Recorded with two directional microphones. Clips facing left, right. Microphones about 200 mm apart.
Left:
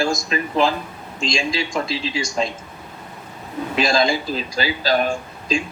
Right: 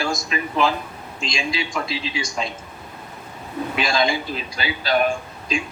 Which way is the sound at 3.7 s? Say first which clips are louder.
Left 3 dB; 40° left (ahead or behind).